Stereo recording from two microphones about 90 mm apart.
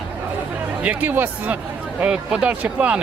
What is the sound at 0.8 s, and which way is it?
Speech, 20° right (ahead or behind).